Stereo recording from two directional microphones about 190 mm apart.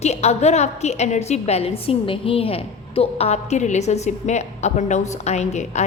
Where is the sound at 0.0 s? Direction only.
35° left (ahead or behind).